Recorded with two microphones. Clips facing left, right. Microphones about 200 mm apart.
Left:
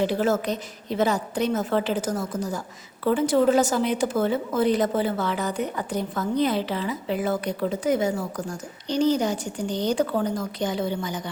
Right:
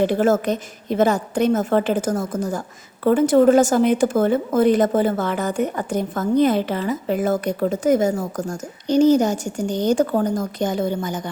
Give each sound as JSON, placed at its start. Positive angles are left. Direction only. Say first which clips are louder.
{"t": 0.0, "sound": "a woman's voice", "louder": "right 5 dB", "side_deg": -50}